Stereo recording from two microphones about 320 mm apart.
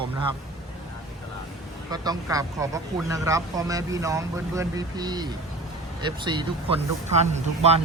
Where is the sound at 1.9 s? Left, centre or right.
Centre.